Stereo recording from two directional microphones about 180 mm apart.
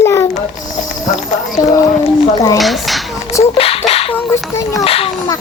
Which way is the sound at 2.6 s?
Centre (ahead or behind).